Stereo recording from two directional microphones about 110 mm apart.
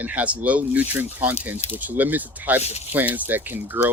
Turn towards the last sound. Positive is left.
turn(degrees=-15)  # may be behind; listen again after turning